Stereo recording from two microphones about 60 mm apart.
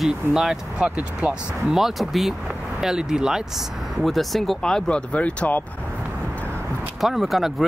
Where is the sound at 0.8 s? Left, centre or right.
Right.